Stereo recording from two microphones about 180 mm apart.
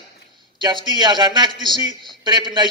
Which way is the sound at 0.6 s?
25° right (ahead or behind).